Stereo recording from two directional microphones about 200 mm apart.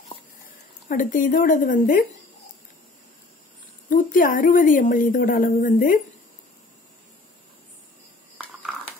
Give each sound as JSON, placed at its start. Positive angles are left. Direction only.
{"t": 0.5, "sound": "speech", "side_deg": 45}
{"t": 3.9, "sound": "a woman's voice", "side_deg": 40}